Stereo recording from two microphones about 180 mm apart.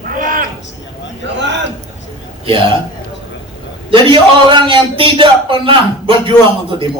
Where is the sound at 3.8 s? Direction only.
30° right (ahead or behind).